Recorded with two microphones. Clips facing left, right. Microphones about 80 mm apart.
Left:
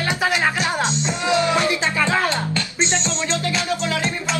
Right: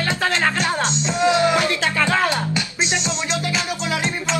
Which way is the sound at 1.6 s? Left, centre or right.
Centre.